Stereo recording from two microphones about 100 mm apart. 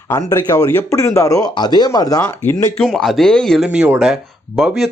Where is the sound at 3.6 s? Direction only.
10° right (ahead or behind).